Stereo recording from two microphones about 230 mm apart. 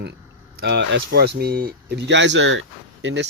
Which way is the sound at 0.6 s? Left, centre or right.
Right.